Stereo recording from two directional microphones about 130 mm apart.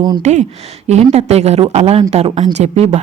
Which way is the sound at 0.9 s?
55° right (ahead or behind).